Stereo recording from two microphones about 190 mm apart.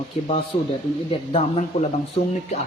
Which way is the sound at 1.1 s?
30° left (ahead or behind).